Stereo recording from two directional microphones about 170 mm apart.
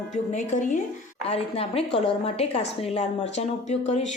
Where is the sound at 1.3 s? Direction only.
35° left (ahead or behind).